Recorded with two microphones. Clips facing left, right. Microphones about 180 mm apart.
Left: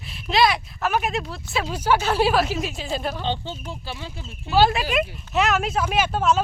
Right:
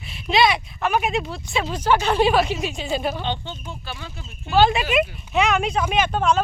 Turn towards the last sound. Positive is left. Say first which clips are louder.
# right 1 dB
turn(degrees=5)  # may be behind; listen again after turning